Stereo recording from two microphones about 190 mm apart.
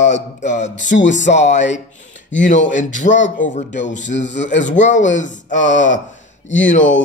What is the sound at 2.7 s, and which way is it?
A man's voice, 40° left (ahead or behind).